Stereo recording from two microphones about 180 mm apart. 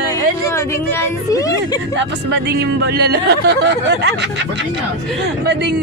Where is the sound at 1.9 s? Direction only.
75° right (ahead or behind).